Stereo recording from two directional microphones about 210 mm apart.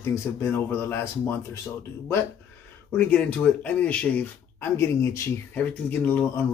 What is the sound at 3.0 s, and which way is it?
Speech, 5° left (ahead or behind).